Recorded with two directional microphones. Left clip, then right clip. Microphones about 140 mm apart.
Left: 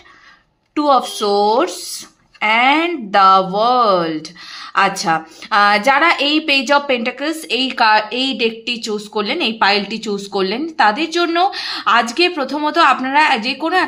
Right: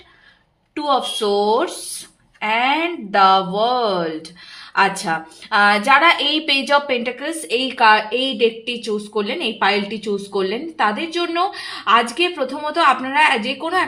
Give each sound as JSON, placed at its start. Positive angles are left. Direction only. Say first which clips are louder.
{"t": 0.8, "sound": "a woman's voice", "louder": "left 4 dB", "side_deg": 30}